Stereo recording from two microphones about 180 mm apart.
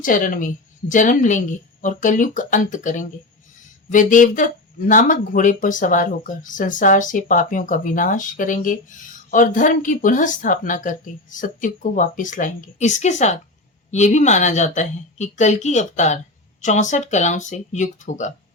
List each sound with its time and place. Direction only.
0.0 s a woman's voice: 50° left (ahead or behind)